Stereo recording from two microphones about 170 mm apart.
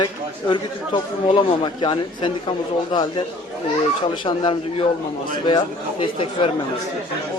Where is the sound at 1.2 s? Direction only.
30° left (ahead or behind).